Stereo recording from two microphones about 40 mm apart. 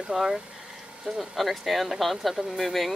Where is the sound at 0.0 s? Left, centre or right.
Centre.